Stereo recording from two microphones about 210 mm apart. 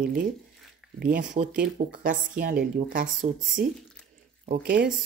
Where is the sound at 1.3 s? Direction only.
35° right (ahead or behind).